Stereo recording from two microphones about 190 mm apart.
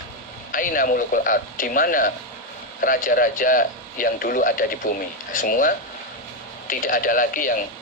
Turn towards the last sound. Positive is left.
turn(degrees=45)  # may be behind; listen again after turning